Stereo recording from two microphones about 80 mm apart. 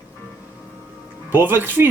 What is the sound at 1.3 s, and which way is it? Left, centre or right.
Speech, right.